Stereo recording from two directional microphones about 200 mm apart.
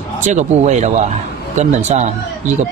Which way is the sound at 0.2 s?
35° right (ahead or behind).